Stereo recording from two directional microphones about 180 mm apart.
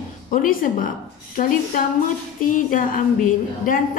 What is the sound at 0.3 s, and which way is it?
Speech, 50° left (ahead or behind).